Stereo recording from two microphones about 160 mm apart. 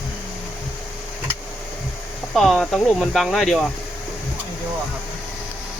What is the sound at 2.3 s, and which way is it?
Speech, centre (ahead or behind).